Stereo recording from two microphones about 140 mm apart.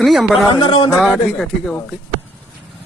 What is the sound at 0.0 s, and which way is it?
Speech, centre (ahead or behind).